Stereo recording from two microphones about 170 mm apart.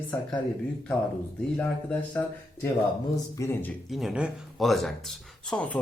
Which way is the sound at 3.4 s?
20° left (ahead or behind).